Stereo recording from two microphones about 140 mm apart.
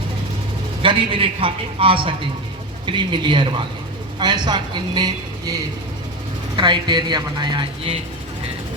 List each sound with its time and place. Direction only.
0.8 s speech: 40° right (ahead or behind)
6.6 s speech: 35° right (ahead or behind)